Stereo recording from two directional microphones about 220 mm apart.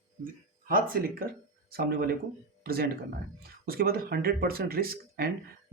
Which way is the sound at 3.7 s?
45° right (ahead or behind).